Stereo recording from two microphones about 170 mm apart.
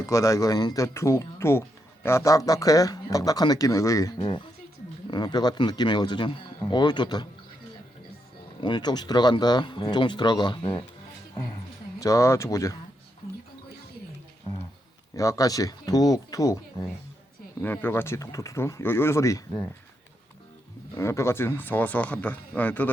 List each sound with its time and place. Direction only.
0.0 s speech: 20° left (ahead or behind)
4.2 s speech: 30° left (ahead or behind)
8.6 s speech: 25° left (ahead or behind)
11.9 s speech: 20° left (ahead or behind)
14.5 s music: 35° left (ahead or behind)
15.1 s speech: 20° left (ahead or behind)
20.9 s speech: 15° left (ahead or behind)